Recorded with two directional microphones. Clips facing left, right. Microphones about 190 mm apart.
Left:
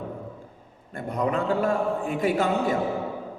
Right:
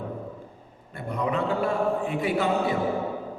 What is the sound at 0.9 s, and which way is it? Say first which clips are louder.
A man's voice: left 1 dB; 45° left (ahead or behind).